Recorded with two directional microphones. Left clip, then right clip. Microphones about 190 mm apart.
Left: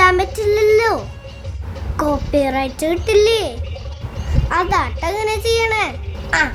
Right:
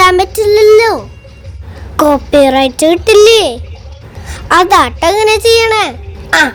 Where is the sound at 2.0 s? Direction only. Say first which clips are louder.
Right 10 dB; 35° right (ahead or behind).